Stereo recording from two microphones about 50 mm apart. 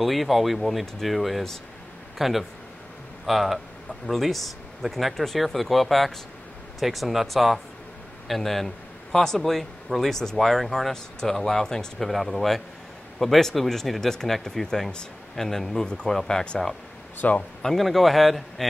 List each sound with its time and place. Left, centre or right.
0.0 s a man's voice: centre
17.7 s speech: centre